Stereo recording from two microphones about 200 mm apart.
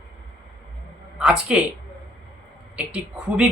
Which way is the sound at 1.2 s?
5° right (ahead or behind).